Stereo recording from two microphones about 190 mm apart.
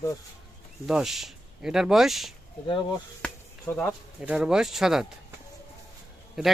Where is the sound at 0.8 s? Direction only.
Centre (ahead or behind).